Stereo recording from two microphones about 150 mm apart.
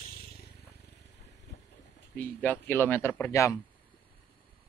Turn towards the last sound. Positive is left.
turn(degrees=15)  # may be behind; listen again after turning